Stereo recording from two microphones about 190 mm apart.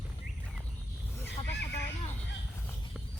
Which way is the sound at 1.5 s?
65° left (ahead or behind).